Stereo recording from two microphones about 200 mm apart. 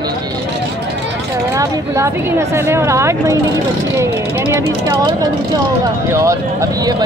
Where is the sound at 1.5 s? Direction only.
15° right (ahead or behind).